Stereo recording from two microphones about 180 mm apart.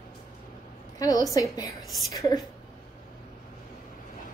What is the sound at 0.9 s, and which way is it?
A woman's voice, 20° left (ahead or behind).